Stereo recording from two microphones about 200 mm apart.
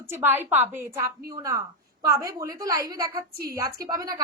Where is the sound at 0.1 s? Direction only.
10° right (ahead or behind).